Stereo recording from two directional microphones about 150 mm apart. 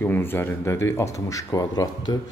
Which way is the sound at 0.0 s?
15° left (ahead or behind).